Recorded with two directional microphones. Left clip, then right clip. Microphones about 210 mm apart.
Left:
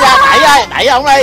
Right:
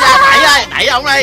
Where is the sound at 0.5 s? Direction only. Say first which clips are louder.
Left 3 dB; 30° left (ahead or behind).